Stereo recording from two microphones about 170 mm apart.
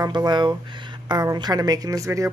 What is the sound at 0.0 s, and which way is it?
Speech, 25° right (ahead or behind).